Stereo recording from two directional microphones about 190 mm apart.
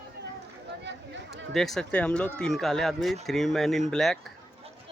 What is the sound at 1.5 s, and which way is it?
Speech, centre (ahead or behind).